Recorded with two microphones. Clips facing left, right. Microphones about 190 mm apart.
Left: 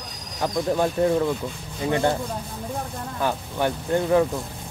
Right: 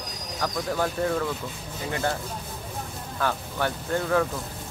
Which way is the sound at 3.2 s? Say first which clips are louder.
Left 3 dB; 20° left (ahead or behind).